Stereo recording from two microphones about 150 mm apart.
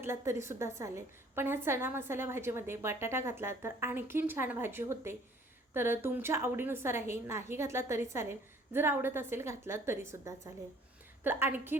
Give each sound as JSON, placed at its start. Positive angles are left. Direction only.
{"t": 0.0, "sound": "a woman's voice", "side_deg": -15}